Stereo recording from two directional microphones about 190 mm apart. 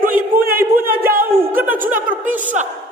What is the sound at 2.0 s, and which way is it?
Speech, 45° right (ahead or behind).